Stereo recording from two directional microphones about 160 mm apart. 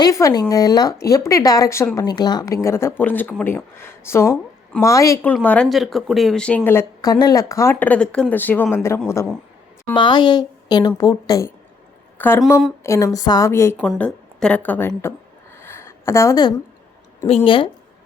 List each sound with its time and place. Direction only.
0.0 s speech: 20° left (ahead or behind)
5.3 s speech: 10° left (ahead or behind)
7.0 s speech: 25° left (ahead or behind)
9.9 s a woman's voice: 30° left (ahead or behind)
13.7 s a woman's voice: centre (ahead or behind); by 15.1 s 15° left (ahead or behind)
15.6 s a sound: 15° left (ahead or behind)
17.2 s a woman's voice: 35° left (ahead or behind)